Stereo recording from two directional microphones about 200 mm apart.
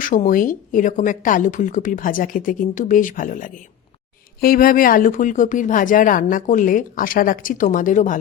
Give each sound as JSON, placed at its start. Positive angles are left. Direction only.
{"t": 0.0, "sound": "a woman's voice", "side_deg": 40}